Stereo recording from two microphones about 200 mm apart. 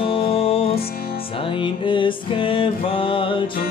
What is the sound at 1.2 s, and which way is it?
Music, 25° left (ahead or behind).